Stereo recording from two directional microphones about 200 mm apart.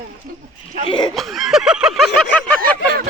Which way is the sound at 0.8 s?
25° left (ahead or behind).